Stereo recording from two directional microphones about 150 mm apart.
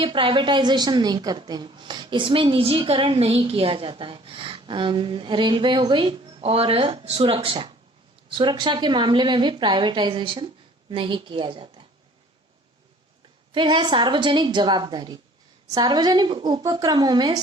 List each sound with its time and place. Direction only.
0.0 s a woman's voice: 35° right (ahead or behind)
13.5 s a woman's voice: 30° right (ahead or behind)